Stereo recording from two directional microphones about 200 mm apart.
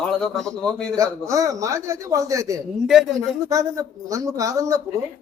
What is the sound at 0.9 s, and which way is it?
Speech, 15° right (ahead or behind).